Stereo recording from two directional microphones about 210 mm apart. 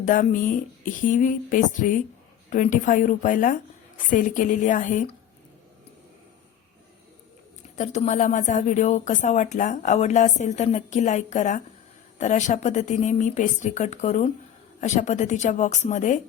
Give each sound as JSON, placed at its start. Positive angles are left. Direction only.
{"t": 0.0, "sound": "a woman's voice", "side_deg": 40}
{"t": 7.8, "sound": "a woman's voice", "side_deg": 35}